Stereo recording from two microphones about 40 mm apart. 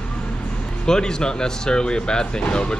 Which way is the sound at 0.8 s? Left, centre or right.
Centre.